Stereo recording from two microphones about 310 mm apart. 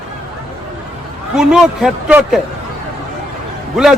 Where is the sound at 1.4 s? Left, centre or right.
Centre.